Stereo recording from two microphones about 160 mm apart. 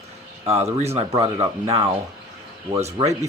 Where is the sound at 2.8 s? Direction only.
45° right (ahead or behind).